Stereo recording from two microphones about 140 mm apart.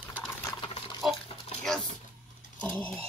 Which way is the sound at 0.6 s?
35° left (ahead or behind).